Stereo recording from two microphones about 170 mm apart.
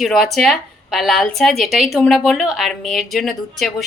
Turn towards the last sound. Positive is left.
turn(degrees=0)  # may be behind; listen again after turning